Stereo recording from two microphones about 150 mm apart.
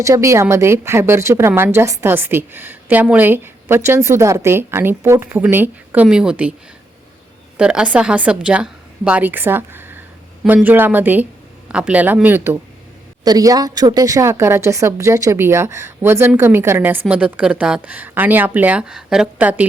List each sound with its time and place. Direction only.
0.0 s a woman's voice: 20° right (ahead or behind)
7.5 s a woman's voice: 5° right (ahead or behind)
13.2 s a woman's voice: 25° right (ahead or behind)